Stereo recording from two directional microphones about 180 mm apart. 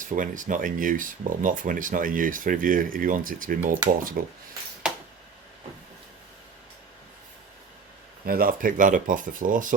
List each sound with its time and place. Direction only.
0.0 s speech: 45° right (ahead or behind)
8.3 s speech: 50° right (ahead or behind)